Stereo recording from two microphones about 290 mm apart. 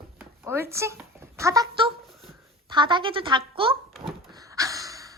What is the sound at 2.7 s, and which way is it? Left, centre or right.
Speech, centre.